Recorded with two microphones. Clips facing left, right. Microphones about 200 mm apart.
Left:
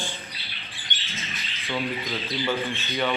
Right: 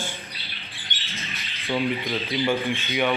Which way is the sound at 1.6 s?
15° right (ahead or behind).